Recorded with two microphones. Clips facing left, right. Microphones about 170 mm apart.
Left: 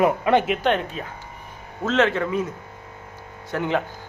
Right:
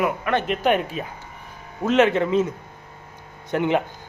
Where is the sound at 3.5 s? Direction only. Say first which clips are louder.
Right 4 dB; 20° right (ahead or behind).